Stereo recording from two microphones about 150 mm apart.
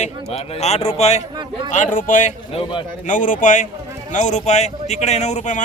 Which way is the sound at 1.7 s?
60° left (ahead or behind).